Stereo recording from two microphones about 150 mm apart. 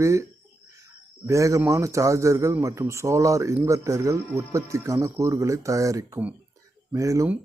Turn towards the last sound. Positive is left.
turn(degrees=-20)  # may be behind; listen again after turning